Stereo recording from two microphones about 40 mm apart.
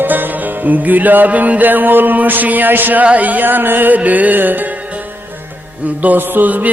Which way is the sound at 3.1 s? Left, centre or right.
Right.